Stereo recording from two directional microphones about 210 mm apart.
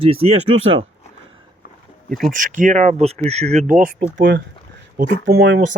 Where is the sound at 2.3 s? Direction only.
40° right (ahead or behind).